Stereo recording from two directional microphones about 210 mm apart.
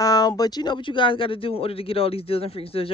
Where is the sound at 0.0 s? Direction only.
20° left (ahead or behind).